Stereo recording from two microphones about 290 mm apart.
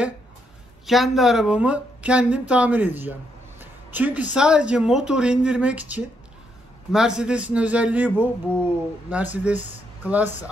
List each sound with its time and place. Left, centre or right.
0.8 s speech: centre